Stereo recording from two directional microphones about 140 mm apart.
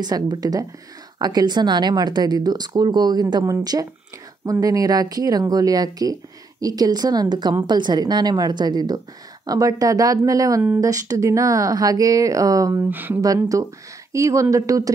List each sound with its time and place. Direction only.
0.0 s speech: 30° right (ahead or behind)
13.2 s speech: 25° right (ahead or behind)